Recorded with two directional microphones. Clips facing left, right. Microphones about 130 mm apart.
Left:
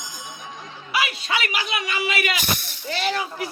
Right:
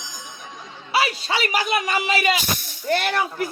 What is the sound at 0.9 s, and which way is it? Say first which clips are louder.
A man's voice: right 3 dB; 30° right (ahead or behind).